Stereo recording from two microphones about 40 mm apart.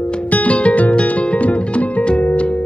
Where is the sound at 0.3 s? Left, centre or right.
Left.